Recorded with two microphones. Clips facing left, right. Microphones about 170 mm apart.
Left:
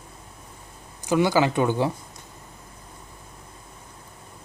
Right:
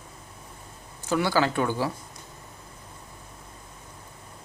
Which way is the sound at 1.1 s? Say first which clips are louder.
Left 4 dB; 15° left (ahead or behind).